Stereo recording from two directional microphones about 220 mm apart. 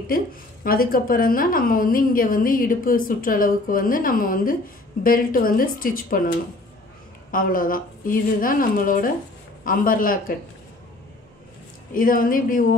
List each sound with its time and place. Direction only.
0.1 s a woman's voice: 40° left (ahead or behind)
11.9 s a woman's voice: 40° left (ahead or behind)